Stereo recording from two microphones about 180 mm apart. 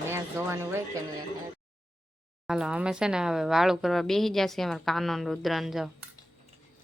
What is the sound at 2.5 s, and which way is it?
Speech, 5° right (ahead or behind).